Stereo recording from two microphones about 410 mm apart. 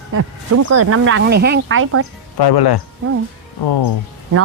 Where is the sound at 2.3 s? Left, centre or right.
Left.